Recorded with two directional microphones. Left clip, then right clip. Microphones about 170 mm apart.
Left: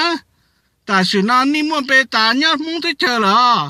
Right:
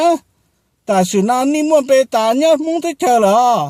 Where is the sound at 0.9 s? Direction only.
25° left (ahead or behind).